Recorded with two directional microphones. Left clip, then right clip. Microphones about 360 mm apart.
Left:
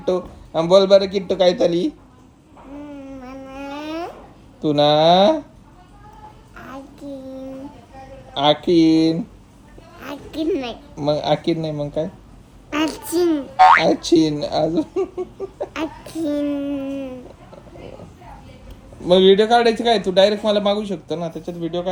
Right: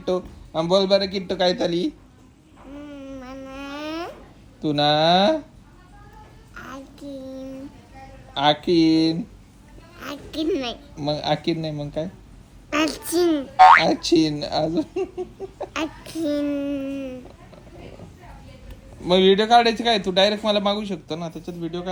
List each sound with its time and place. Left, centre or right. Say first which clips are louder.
0.0 s a child's voice: left 4 dB; centre
2.7 s a sound: left 2 dB; centre
4.6 s a child's voice: left 4 dB; centre
6.5 s child singing: even; centre
8.3 s a child's voice: left 3 dB; centre
19.0 s a child's voice: left 4 dB; centre